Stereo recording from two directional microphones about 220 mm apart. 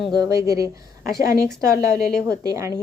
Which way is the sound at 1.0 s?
45° left (ahead or behind).